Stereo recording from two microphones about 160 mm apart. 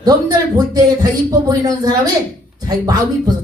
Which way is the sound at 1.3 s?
25° right (ahead or behind).